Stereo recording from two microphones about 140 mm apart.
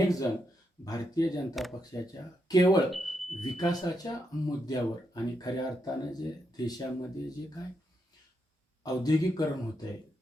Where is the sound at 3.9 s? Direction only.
25° left (ahead or behind).